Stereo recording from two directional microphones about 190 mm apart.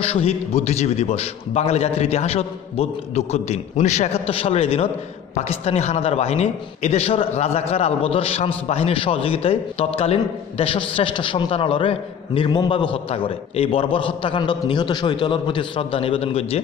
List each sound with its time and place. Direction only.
0.0 s a man's voice: 30° left (ahead or behind)